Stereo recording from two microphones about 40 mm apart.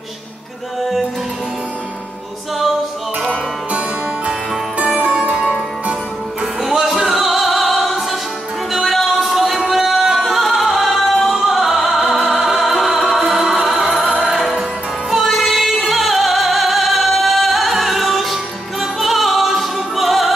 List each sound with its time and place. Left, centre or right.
4.7 s music: right
5.3 s music: right
6.6 s music: centre
14.3 s music: centre